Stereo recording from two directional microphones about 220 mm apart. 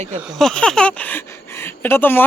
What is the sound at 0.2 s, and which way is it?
Speech, centre (ahead or behind).